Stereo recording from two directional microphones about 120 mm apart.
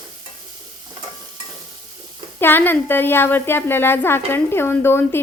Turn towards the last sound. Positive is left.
turn(degrees=20)  # may be behind; listen again after turning